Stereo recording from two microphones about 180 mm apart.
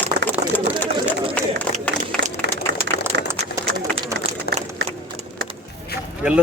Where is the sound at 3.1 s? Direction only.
85° right.